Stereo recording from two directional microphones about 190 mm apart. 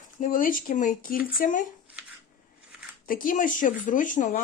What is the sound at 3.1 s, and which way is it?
Speech, 45° left (ahead or behind).